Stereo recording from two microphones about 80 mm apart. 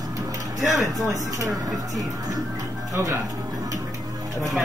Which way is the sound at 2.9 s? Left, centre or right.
Right.